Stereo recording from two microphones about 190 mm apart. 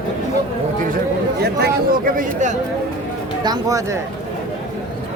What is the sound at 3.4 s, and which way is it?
Speech, 20° right (ahead or behind).